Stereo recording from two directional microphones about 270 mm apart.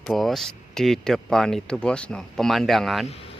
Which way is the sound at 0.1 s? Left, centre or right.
Centre.